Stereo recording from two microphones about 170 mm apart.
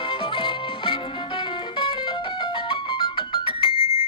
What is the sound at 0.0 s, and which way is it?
Music, 30° left (ahead or behind).